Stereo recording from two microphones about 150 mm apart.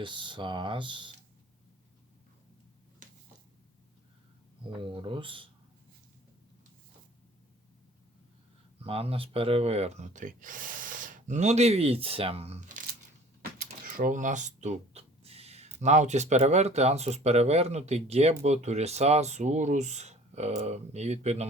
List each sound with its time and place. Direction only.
0.0 s speech: 30° right (ahead or behind)
4.8 s speech: 35° right (ahead or behind)
8.8 s speech: 40° right (ahead or behind); by 12.8 s 55° right (ahead or behind)
13.8 s speech: 65° right (ahead or behind); by 21.4 s 45° right (ahead or behind)